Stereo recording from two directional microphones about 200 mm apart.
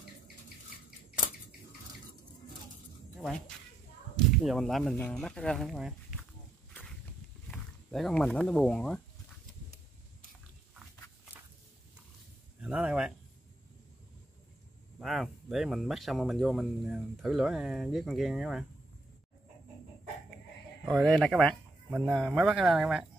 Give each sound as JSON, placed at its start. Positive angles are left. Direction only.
{"t": 3.2, "sound": "speech", "side_deg": 5}
{"t": 7.5, "sound": "speech", "side_deg": 0}
{"t": 12.5, "sound": "speech", "side_deg": -5}
{"t": 15.0, "sound": "speech", "side_deg": 0}
{"t": 20.8, "sound": "speech", "side_deg": 0}